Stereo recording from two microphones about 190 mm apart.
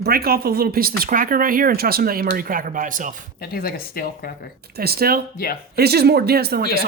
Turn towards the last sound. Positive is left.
turn(degrees=-55)  # may be behind; listen again after turning